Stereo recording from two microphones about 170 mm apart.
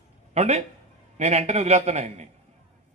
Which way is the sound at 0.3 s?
40° right (ahead or behind).